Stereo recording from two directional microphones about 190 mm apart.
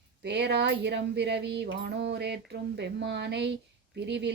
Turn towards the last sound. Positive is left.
turn(degrees=-65)  # may be behind; listen again after turning